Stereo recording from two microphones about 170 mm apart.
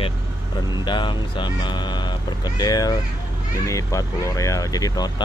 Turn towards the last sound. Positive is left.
turn(degrees=20)  # may be behind; listen again after turning